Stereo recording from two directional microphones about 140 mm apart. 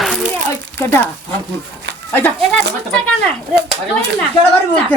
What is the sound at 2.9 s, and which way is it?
Speech, 10° left (ahead or behind).